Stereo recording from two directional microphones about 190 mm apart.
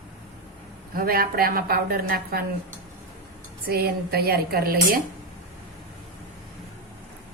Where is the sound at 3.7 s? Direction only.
55° right (ahead or behind).